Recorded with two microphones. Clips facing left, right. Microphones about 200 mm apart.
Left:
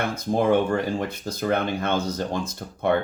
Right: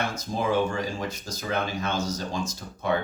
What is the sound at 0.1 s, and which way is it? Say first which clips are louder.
Speech: left 6 dB; 60° left (ahead or behind).